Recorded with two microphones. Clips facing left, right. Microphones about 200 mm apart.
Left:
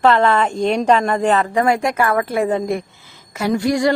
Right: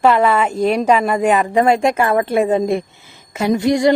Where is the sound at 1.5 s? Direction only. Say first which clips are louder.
Right 3 dB; 25° right (ahead or behind).